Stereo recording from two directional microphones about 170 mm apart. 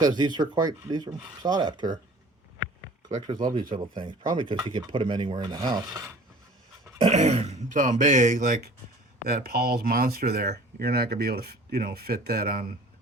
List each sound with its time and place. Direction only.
0.0 s speech: 25° right (ahead or behind)
3.1 s speech: 30° right (ahead or behind)
7.0 s speech: 40° right (ahead or behind); by 12.7 s 60° right (ahead or behind)